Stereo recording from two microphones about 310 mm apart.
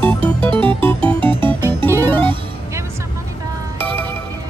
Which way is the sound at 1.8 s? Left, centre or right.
Centre.